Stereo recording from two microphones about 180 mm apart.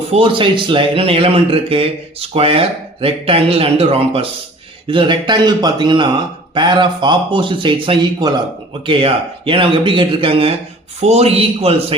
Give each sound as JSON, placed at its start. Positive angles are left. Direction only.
{"t": 0.1, "sound": "speech", "side_deg": -30}